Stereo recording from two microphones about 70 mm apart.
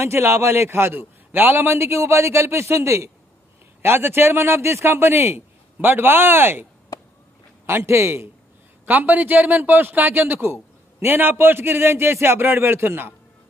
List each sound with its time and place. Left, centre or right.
0.0 s a man's voice: right
8.8 s a man's voice: right